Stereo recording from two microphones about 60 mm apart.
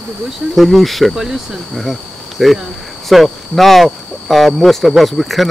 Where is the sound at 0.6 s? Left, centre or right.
Centre.